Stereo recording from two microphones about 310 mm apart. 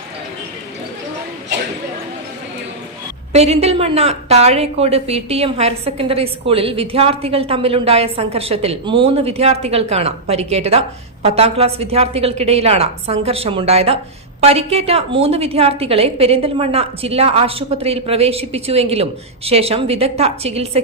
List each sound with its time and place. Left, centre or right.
3.3 s a woman's voice: centre